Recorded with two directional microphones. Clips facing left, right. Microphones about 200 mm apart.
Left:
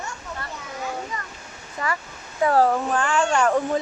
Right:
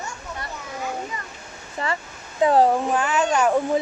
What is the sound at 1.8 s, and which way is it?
Speech, 30° right (ahead or behind).